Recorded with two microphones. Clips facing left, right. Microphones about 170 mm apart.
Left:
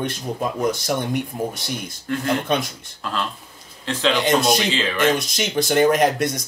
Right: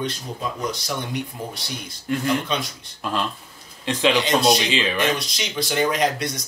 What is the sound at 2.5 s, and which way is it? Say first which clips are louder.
Speech: left 4 dB; 50° left (ahead or behind).